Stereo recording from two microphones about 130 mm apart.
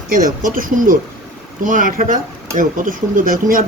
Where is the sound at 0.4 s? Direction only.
90° right.